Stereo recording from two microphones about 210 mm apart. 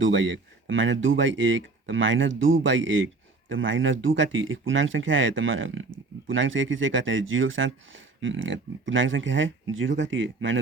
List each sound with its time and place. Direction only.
0.0 s speech: 60° right (ahead or behind)